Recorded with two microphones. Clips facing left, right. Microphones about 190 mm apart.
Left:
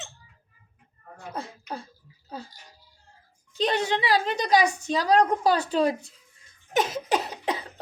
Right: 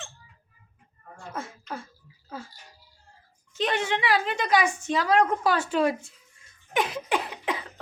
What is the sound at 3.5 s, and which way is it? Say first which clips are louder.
A child's voice: left 2 dB; 35° left (ahead or behind).